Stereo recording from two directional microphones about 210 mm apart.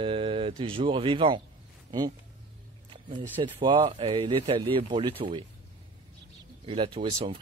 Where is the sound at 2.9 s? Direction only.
25° right (ahead or behind).